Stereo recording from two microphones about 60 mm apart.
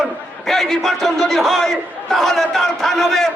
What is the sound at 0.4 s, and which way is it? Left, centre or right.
A man's voice, centre.